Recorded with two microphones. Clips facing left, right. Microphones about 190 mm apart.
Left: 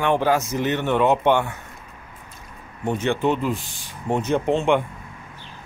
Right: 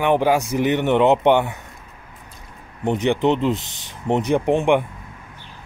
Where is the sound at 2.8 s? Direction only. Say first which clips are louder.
Right 3 dB; 20° right (ahead or behind).